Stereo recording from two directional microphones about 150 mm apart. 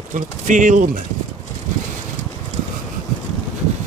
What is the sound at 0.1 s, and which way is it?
Speech, 60° right (ahead or behind).